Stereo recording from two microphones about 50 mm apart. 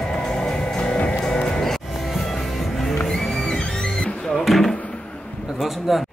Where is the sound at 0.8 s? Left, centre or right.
Left.